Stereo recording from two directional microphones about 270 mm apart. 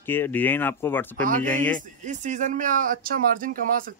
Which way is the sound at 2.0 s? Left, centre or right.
Right.